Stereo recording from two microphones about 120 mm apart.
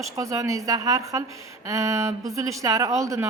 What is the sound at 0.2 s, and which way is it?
Speech, 25° right (ahead or behind).